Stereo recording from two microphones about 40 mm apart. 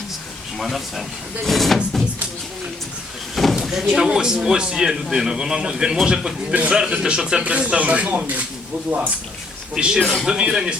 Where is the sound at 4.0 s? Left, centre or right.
Centre.